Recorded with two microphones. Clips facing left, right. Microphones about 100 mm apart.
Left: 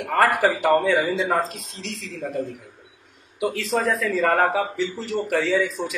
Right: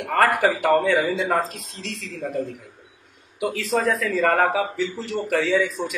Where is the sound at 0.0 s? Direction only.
Centre (ahead or behind).